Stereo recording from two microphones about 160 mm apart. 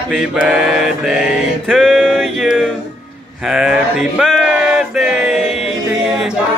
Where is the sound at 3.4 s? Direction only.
5° right (ahead or behind).